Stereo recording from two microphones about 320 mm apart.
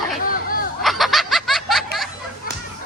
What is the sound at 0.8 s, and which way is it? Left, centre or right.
Snicker, centre.